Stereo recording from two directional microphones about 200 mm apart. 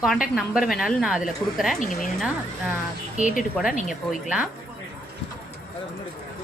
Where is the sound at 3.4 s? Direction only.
Centre (ahead or behind).